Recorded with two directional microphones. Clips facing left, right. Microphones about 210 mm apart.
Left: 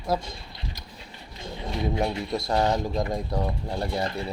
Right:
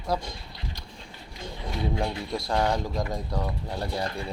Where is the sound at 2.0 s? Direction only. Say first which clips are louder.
Left 3 dB; 20° left (ahead or behind).